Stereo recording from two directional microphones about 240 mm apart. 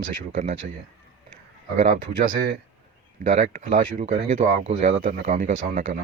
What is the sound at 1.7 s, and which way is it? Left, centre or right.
Speech, right.